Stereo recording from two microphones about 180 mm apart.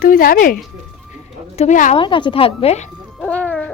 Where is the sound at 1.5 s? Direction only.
40° left (ahead or behind).